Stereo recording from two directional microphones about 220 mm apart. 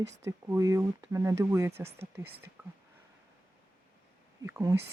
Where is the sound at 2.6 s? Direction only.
10° right (ahead or behind).